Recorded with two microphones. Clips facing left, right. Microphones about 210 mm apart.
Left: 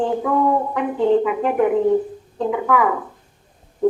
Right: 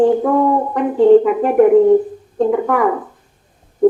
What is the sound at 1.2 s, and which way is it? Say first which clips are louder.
A woman's voice: right 7 dB; 45° right (ahead or behind).